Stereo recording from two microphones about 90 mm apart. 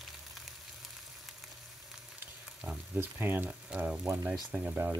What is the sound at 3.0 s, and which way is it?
Speech, 25° right (ahead or behind).